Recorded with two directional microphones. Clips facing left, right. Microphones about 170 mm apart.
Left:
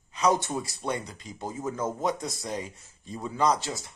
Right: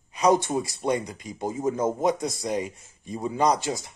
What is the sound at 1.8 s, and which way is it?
Speech, 15° right (ahead or behind).